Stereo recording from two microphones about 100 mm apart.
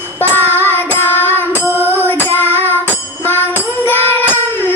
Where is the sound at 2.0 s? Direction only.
20° left (ahead or behind).